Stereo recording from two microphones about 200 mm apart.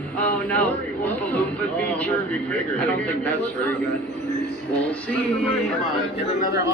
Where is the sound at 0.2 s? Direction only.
10° left (ahead or behind).